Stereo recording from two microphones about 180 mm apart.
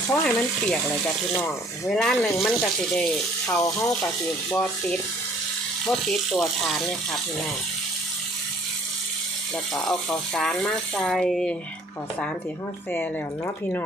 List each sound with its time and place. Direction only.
0.1 s speech: 5° left (ahead or behind)
1.9 s speech: 5° left (ahead or behind)
3.6 s speech: 20° left (ahead or behind)
4.5 s speech: 5° left (ahead or behind)
9.7 s speech: 5° left (ahead or behind)